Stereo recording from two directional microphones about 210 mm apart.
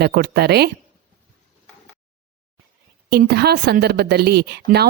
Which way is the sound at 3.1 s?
50° right (ahead or behind).